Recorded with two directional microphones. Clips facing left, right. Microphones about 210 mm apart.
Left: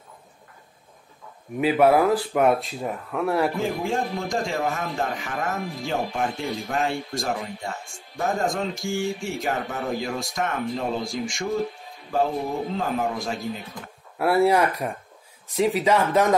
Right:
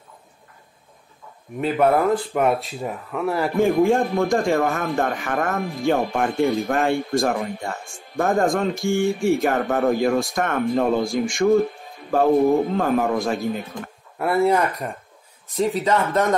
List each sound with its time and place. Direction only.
1.6 s speech: 5° left (ahead or behind)
3.5 s a man's voice: 55° right (ahead or behind)
14.1 s speech: 5° left (ahead or behind)